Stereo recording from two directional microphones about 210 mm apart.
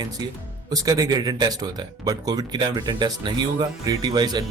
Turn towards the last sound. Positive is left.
turn(degrees=-20)  # may be behind; listen again after turning